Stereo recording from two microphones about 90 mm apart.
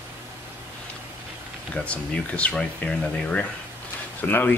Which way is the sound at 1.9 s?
15° left (ahead or behind).